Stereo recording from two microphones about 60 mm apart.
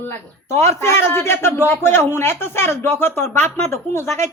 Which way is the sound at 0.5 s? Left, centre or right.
Left.